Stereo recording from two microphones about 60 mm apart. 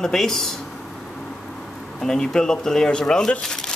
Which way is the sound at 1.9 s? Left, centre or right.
Centre.